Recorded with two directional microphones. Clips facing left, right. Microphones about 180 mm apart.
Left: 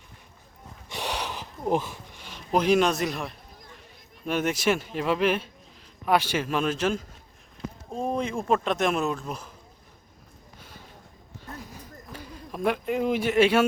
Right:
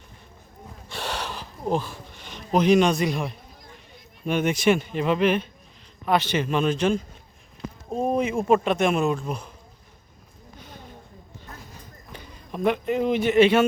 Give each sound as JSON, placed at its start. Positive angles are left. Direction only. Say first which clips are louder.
{"t": 0.9, "sound": "wood", "louder": "even", "side_deg": 15}
{"t": 2.2, "sound": "a man's voice", "louder": "right 3 dB", "side_deg": 5}
{"t": 7.9, "sound": "speech", "louder": "right 5 dB", "side_deg": -5}
{"t": 12.1, "sound": "speech", "louder": "right 2 dB", "side_deg": 5}